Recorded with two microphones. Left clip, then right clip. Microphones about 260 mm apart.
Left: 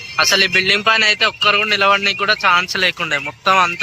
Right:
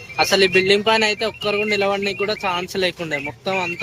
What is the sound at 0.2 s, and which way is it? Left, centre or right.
A man's voice, centre.